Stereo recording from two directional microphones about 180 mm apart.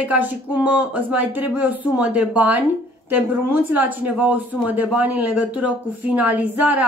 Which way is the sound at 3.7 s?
10° right (ahead or behind).